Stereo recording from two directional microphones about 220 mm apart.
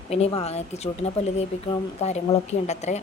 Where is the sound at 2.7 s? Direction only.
30° left (ahead or behind).